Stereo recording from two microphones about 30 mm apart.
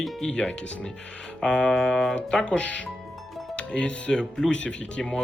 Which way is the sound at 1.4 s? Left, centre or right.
Left.